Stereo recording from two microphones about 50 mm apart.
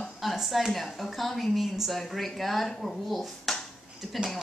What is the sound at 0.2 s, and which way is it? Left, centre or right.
A woman's voice, centre.